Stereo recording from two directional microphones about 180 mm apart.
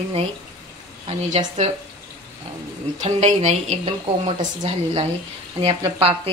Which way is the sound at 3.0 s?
35° right (ahead or behind).